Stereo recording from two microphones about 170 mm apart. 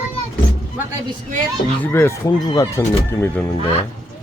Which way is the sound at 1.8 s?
15° left (ahead or behind).